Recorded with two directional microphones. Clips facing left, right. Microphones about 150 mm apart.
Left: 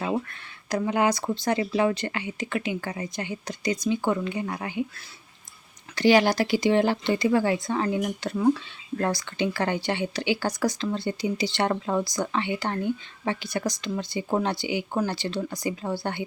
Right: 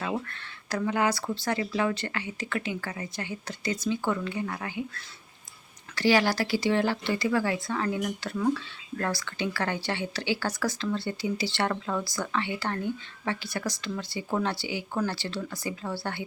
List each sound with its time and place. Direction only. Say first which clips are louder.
0.7 s speech: left 3 dB; 20° left (ahead or behind)
6.0 s speech: left 4 dB; 20° left (ahead or behind)